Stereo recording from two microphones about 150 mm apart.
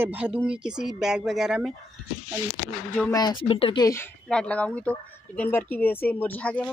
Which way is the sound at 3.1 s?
30° left (ahead or behind).